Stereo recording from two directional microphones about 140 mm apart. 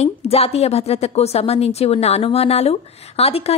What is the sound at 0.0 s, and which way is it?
A woman's voice, 45° left (ahead or behind).